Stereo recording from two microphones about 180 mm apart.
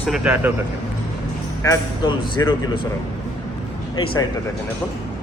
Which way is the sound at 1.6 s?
20° left (ahead or behind).